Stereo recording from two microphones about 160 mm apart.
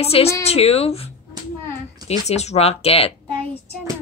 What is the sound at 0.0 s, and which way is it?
Speech, 40° left (ahead or behind).